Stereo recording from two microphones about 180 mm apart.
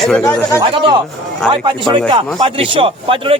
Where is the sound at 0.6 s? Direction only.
25° right (ahead or behind).